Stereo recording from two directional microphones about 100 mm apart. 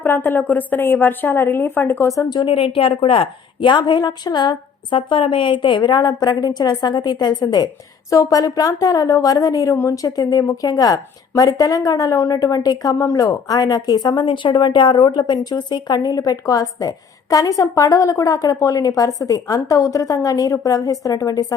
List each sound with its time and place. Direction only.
0.0 s a woman's voice: 20° left (ahead or behind)
2.3 s a woman's voice: 60° left (ahead or behind)
4.9 s a woman's voice: 60° left (ahead or behind); by 21.4 s 35° left (ahead or behind)